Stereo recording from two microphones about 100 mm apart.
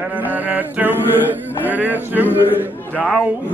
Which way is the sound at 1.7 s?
20° right (ahead or behind).